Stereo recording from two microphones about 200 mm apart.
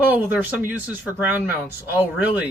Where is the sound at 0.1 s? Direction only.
10° right (ahead or behind).